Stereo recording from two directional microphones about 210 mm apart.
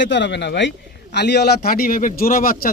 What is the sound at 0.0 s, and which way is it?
A man's voice, 55° left (ahead or behind).